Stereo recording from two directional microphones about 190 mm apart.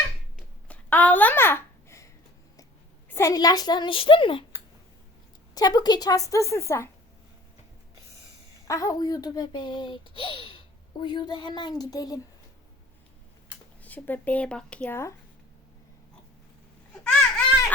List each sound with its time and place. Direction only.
0.3 s babbling: 10° left (ahead or behind)
3.1 s speech: 15° left (ahead or behind)
5.5 s a woman's voice: 20° left (ahead or behind)
8.6 s speech: 15° left (ahead or behind)
13.8 s a woman's voice: 10° left (ahead or behind)
17.0 s a sound: 5° left (ahead or behind)